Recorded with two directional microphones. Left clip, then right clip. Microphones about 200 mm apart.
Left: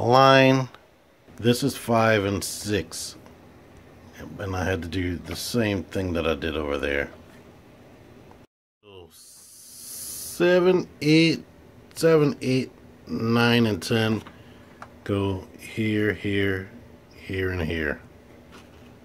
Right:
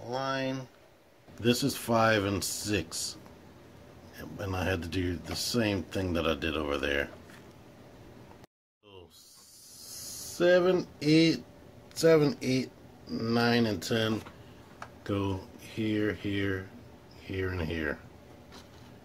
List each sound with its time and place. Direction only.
0.0 s speech: 45° left (ahead or behind)
1.4 s speech: 20° left (ahead or behind)
4.2 s speech: 15° left (ahead or behind)
10.3 s speech: 30° left (ahead or behind)